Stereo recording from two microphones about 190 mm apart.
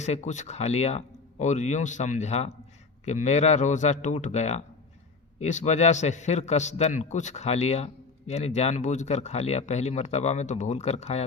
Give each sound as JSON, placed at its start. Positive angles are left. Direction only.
{"t": 0.0, "sound": "speech", "side_deg": 40}